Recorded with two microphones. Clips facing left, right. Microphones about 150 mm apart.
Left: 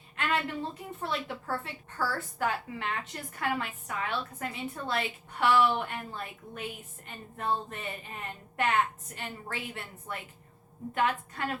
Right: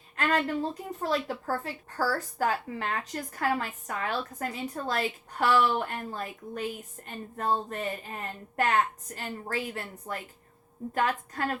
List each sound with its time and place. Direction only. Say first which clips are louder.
0.2 s a woman's voice: right 4 dB; 40° right (ahead or behind)